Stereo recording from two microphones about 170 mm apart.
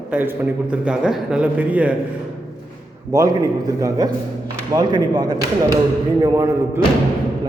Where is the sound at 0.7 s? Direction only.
5° right (ahead or behind).